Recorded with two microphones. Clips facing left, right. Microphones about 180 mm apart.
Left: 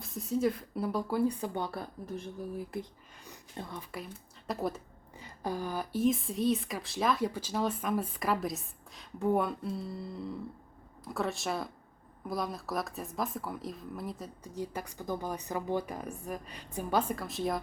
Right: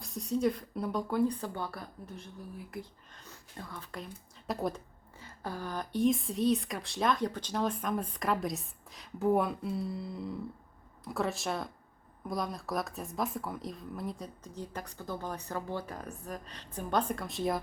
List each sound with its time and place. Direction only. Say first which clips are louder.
0.0 s speech: even; centre (ahead or behind)
1.5 s a woman's voice: left 3 dB; 20° left (ahead or behind)
3.6 s a woman's voice: left 3 dB; 20° left (ahead or behind)
4.4 s speech: even; centre (ahead or behind)
5.2 s speech: left 4 dB; 15° left (ahead or behind)
14.4 s speech: left 6 dB; 10° left (ahead or behind)